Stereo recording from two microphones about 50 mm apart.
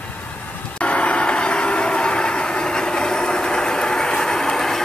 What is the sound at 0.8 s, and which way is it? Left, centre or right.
Vehicle, left.